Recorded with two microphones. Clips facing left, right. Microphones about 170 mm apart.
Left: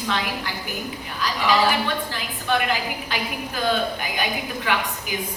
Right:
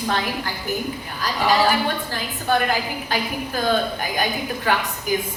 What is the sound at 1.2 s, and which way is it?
A woman's voice, 45° right (ahead or behind).